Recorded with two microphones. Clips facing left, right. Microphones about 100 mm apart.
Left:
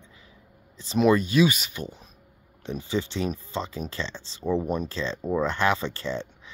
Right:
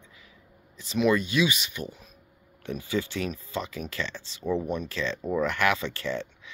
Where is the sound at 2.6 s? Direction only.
25° left (ahead or behind).